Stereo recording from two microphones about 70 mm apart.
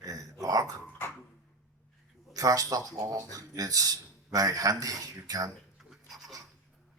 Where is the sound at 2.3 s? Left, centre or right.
Right.